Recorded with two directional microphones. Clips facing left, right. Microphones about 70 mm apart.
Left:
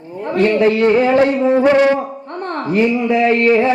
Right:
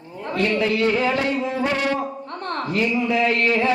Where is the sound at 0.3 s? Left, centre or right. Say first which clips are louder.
Left 8 dB; left.